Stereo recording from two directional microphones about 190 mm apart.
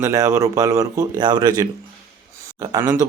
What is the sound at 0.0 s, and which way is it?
Speech, 15° right (ahead or behind).